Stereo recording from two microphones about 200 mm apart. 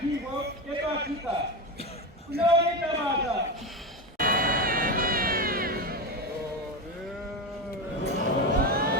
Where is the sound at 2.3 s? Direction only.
50° right (ahead or behind).